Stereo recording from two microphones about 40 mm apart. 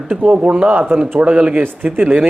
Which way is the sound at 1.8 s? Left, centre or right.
Right.